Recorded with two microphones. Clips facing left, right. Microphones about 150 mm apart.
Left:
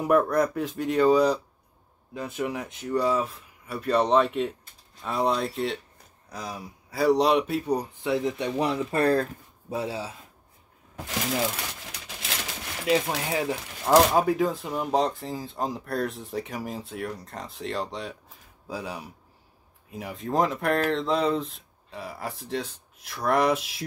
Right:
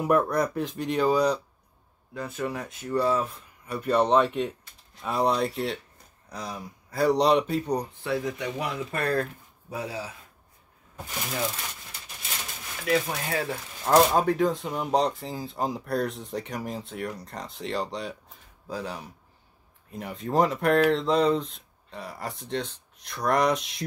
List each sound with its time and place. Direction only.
0.0 s speech: centre (ahead or behind)
2.1 s speech: 15° left (ahead or behind)
3.3 s speech: centre (ahead or behind)
8.0 s speech: 25° left (ahead or behind)
11.8 s a sound: 80° left
13.3 s speech: 15° left (ahead or behind)
13.9 s speech: 5° left (ahead or behind)